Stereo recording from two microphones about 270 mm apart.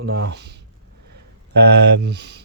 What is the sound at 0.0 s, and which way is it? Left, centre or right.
Speech, right.